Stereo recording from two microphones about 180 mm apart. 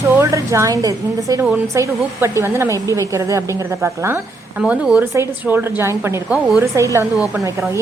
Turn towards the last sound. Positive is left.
turn(degrees=-15)  # may be behind; listen again after turning